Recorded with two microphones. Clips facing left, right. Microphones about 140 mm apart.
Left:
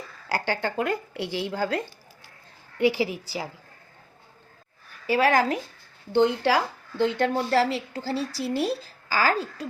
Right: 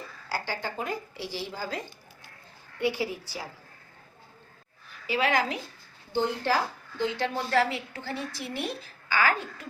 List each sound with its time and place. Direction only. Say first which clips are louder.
0.3 s speech: left 6 dB; 70° left (ahead or behind)
2.7 s a woman's voice: left 6 dB; 90° left
5.0 s a woman's voice: left 5 dB; 45° left (ahead or behind)
6.1 s a woman's voice: left 6 dB; 75° left (ahead or behind)
7.3 s a woman's voice: left 3 dB; 35° left (ahead or behind)